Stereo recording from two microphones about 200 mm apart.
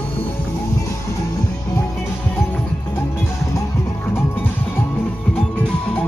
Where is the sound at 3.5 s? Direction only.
10° left (ahead or behind).